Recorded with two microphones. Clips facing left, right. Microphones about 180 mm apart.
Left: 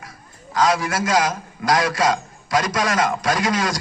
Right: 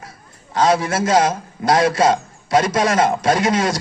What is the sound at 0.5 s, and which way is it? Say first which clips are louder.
A man's voice: right 3 dB; 25° right (ahead or behind).